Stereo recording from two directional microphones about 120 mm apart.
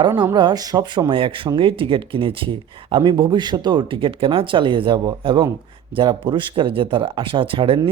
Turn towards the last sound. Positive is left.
turn(degrees=-45)  # may be behind; listen again after turning